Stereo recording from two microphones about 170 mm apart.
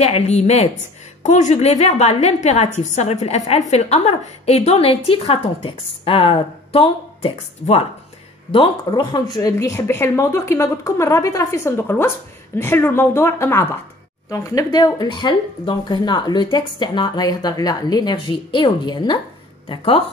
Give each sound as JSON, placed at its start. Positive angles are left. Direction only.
{"t": 0.0, "sound": "a woman's voice", "side_deg": 40}